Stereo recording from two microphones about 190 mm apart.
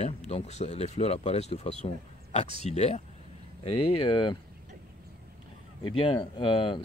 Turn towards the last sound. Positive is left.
turn(degrees=25)  # may be behind; listen again after turning